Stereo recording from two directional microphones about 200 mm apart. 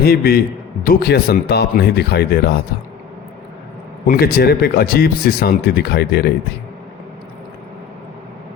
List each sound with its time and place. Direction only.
0.0 s speech: 50° left (ahead or behind)
4.0 s speech: 45° left (ahead or behind)